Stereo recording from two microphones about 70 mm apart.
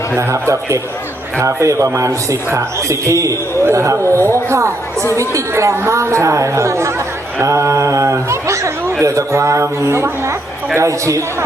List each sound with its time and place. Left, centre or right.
0.2 s a man's voice: right